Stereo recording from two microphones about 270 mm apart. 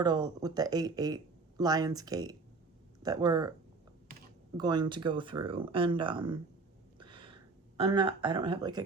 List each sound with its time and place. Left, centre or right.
0.0 s speech: centre
4.5 s speech: centre
7.0 s a sound: centre
7.9 s speech: centre